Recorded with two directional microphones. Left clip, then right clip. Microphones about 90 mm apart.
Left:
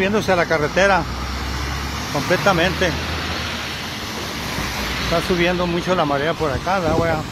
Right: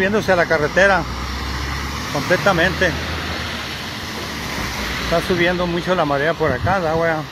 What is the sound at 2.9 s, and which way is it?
Vehicle, 25° left (ahead or behind).